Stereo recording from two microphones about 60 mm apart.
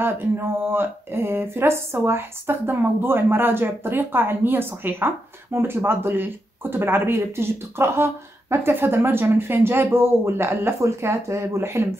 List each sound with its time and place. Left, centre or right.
0.7 s speech: right
10.8 s speech: right